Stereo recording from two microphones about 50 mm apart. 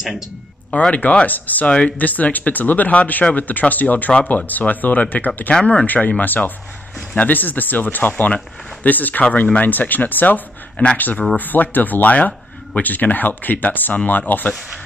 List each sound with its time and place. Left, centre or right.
0.7 s speech: left
5.5 s speech: left
5.9 s speech: left